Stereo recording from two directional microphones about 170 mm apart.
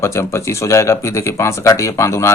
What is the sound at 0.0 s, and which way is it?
Speech, 15° left (ahead or behind).